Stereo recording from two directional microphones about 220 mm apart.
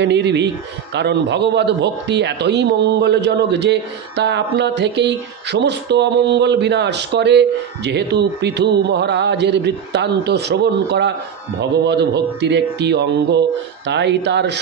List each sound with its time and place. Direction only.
0.0 s a man's voice: 50° right (ahead or behind)